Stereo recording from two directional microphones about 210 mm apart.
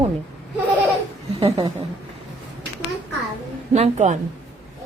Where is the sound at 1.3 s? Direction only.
30° right (ahead or behind).